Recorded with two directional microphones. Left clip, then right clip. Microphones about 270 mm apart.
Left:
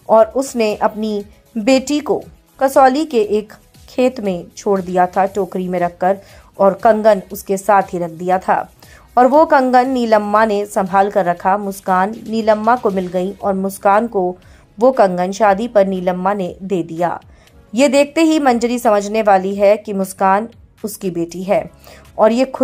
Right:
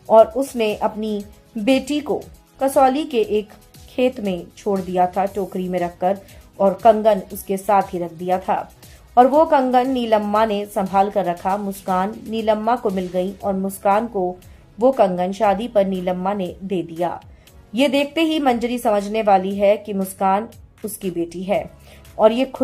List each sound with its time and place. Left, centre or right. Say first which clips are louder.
0.1 s a woman's voice: left 1 dB; centre